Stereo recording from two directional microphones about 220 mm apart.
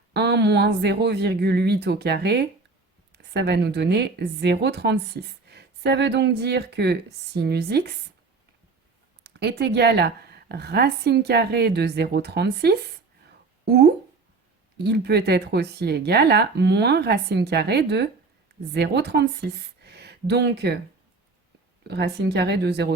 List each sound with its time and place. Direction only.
0.1 s a woman's voice: 50° right (ahead or behind)
9.2 s a woman's voice: 50° right (ahead or behind)
14.8 s a woman's voice: 50° right (ahead or behind)
21.8 s a woman's voice: 50° right (ahead or behind)